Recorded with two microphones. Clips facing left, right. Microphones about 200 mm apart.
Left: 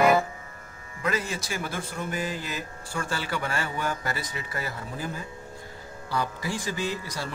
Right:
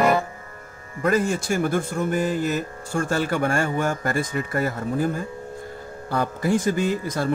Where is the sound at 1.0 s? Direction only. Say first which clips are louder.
Right 8 dB; 50° right (ahead or behind).